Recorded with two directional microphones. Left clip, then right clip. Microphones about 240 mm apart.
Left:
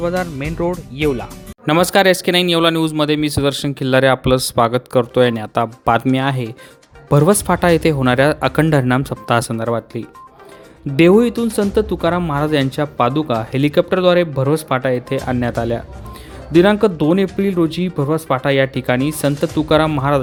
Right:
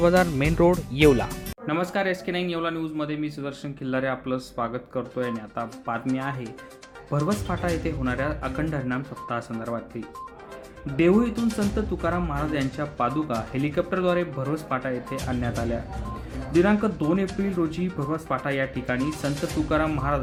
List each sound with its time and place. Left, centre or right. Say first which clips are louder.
0.0 s speech: even; centre
1.6 s speech: left 13 dB; left